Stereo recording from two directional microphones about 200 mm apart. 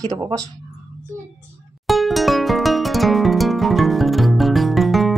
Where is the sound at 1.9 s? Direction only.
Centre (ahead or behind).